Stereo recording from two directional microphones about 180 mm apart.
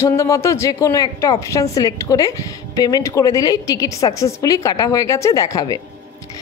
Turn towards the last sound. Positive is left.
turn(degrees=20)  # may be behind; listen again after turning